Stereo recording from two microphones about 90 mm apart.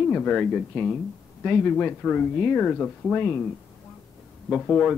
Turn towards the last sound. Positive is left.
turn(degrees=15)  # may be behind; listen again after turning